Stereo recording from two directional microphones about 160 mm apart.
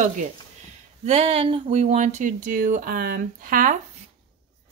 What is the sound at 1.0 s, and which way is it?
Speech, 40° right (ahead or behind).